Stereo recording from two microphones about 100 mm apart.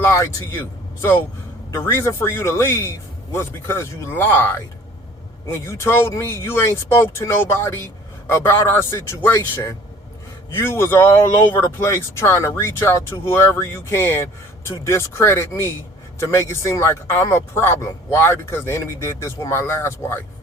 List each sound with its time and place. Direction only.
0.0 s speech: 30° left (ahead or behind)
1.7 s speech: 25° left (ahead or behind)